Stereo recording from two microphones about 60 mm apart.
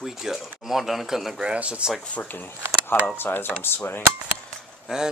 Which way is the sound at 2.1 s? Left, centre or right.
Left.